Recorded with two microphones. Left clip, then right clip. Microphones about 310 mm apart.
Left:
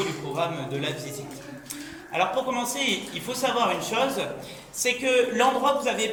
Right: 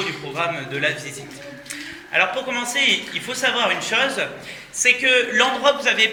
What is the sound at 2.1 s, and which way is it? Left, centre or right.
A man's voice, centre.